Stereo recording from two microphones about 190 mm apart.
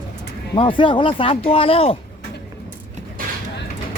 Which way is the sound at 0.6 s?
25° left (ahead or behind).